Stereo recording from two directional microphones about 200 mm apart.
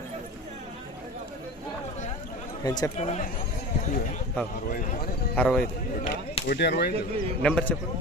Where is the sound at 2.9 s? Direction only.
35° left (ahead or behind).